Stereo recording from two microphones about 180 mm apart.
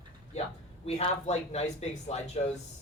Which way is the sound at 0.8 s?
35° left (ahead or behind).